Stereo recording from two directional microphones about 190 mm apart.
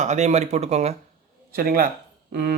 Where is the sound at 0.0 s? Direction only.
40° right (ahead or behind).